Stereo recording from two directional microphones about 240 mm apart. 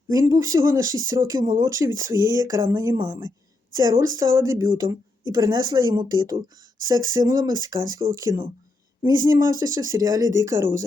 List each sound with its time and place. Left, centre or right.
0.1 s speech: centre